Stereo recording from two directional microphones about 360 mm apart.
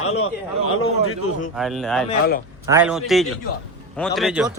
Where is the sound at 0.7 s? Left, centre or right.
Left.